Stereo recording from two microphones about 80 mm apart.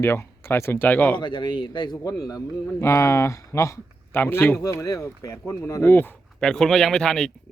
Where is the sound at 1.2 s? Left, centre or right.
Left.